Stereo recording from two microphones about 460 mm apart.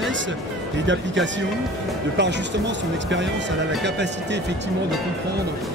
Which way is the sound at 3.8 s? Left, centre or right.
Right.